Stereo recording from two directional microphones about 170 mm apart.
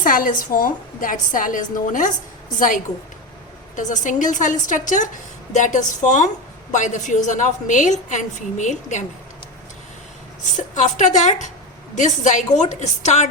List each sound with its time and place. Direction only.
0.0 s a woman's voice: 55° left (ahead or behind)
10.6 s a woman's voice: 45° left (ahead or behind)